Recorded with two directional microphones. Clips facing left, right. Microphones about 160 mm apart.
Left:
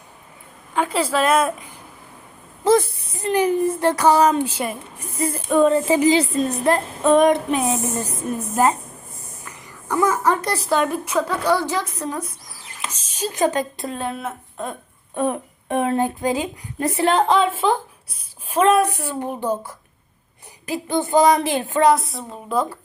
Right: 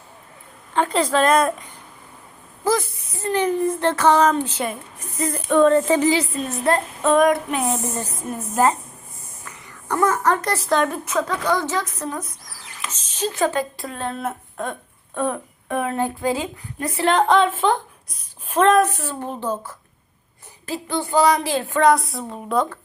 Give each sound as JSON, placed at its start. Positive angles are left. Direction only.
{"t": 0.7, "sound": "speech", "side_deg": 5}
{"t": 2.6, "sound": "a sound", "side_deg": 30}
{"t": 3.2, "sound": "speech", "side_deg": 10}
{"t": 6.1, "sound": "a woman's voice", "side_deg": 30}
{"t": 6.7, "sound": "a sound", "side_deg": 15}
{"t": 9.5, "sound": "speech", "side_deg": 10}
{"t": 14.2, "sound": "speech", "side_deg": 0}
{"t": 15.1, "sound": "speech", "side_deg": 15}
{"t": 17.1, "sound": "speech", "side_deg": 0}
{"t": 20.7, "sound": "a sound", "side_deg": 15}
{"t": 21.8, "sound": "speech", "side_deg": 0}